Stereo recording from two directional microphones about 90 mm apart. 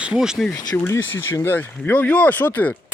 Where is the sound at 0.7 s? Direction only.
25° left (ahead or behind).